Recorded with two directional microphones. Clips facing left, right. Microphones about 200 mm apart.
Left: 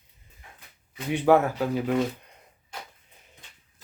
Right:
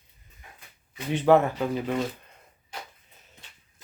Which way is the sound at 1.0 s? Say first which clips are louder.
Even; 10° left (ahead or behind).